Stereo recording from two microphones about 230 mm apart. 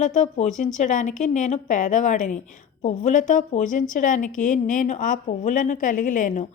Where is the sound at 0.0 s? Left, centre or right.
Left.